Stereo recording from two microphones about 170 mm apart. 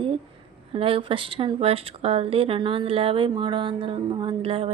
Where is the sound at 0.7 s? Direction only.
35° right (ahead or behind).